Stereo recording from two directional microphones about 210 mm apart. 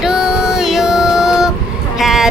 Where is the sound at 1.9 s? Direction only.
Centre (ahead or behind).